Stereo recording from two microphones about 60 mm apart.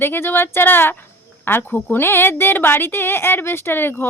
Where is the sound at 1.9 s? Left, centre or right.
Left.